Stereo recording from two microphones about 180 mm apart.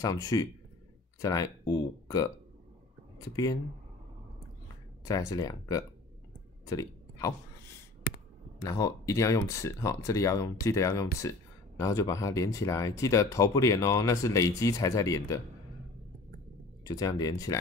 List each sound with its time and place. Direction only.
0.0 s speech: 20° left (ahead or behind)
5.0 s speech: 20° left (ahead or behind)
6.6 s a sound: 20° left (ahead or behind)
8.5 s speech: 20° left (ahead or behind)
16.8 s speech: 20° left (ahead or behind)